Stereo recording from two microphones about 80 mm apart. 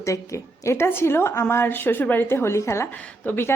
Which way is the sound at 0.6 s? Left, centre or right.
Left.